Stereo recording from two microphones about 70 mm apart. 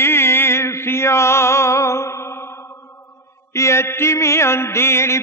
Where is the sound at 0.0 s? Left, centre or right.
Left.